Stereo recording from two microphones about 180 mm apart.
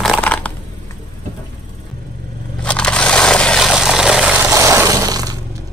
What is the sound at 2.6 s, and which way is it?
Crushing, 5° left (ahead or behind).